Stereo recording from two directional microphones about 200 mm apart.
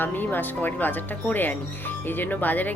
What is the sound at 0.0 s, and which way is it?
Speech, 10° left (ahead or behind).